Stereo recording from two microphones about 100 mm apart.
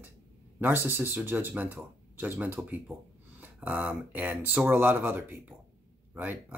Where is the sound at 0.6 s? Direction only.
20° right (ahead or behind).